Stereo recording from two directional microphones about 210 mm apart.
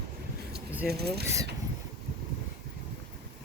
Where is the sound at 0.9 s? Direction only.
50° right (ahead or behind).